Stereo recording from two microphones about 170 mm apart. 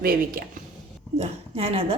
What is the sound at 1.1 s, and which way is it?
Speech, 35° right (ahead or behind).